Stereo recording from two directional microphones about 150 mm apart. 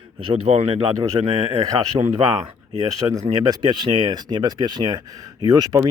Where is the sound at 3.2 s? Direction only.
30° right (ahead or behind).